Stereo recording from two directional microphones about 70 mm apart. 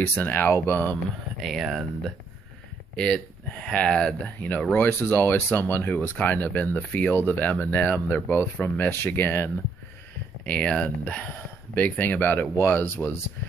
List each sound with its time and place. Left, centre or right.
0.0 s speech: left
1.4 s speech: centre
3.6 s speech: centre
4.4 s speech: left
10.4 s speech: centre; by 13.1 s left